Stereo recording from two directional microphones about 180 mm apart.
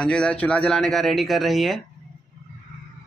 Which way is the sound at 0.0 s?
5° left (ahead or behind).